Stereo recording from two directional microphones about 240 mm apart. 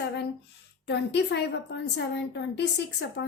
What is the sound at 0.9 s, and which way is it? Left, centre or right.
A woman's voice, left.